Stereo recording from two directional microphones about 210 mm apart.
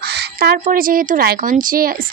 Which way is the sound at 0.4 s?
45° right (ahead or behind).